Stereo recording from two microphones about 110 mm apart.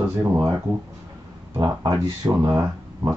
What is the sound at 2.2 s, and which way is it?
Speech, 30° right (ahead or behind).